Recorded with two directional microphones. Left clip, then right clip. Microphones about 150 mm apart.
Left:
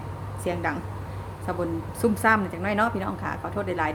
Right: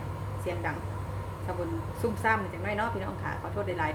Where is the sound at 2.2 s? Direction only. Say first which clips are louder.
Left 5 dB; 50° left (ahead or behind).